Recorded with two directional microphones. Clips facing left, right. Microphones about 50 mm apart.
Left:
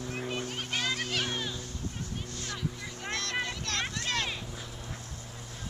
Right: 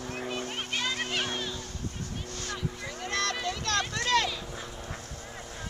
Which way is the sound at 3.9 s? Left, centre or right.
Right.